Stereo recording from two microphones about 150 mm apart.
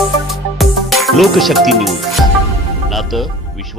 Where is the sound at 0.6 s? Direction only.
Centre (ahead or behind).